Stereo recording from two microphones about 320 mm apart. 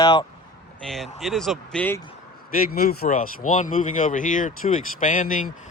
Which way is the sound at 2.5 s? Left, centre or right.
Left.